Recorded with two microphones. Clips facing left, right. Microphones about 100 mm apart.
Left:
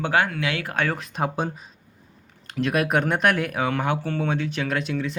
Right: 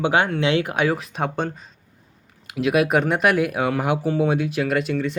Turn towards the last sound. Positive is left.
turn(degrees=0)  # may be behind; listen again after turning